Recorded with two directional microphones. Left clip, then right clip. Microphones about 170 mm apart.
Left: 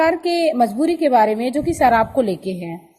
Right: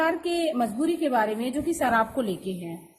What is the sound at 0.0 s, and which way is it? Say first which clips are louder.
A woman's voice: left 8 dB; 30° left (ahead or behind).